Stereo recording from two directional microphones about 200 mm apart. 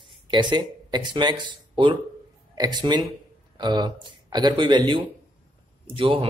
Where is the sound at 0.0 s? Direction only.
20° right (ahead or behind).